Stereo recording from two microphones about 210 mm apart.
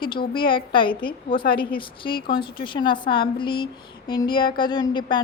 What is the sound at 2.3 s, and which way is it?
Speech, 20° left (ahead or behind).